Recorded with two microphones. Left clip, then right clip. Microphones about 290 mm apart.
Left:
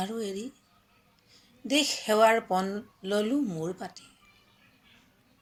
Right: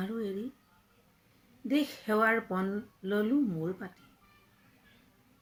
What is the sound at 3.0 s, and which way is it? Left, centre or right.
Speech, left.